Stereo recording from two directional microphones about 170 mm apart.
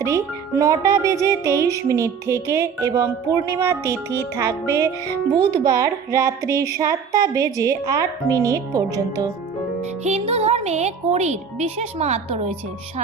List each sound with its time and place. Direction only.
0.6 s speech: 20° right (ahead or behind)
1.2 s music: 15° right (ahead or behind)
5.5 s speech: 20° right (ahead or behind)
10.0 s speech: 40° right (ahead or behind)